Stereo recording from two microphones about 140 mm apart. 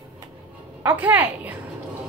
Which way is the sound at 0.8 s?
15° right (ahead or behind).